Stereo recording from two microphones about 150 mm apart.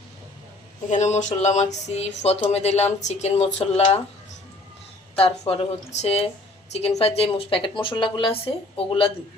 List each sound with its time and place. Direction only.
0.9 s speech: 50° left (ahead or behind)
5.1 s a woman's voice: 40° left (ahead or behind)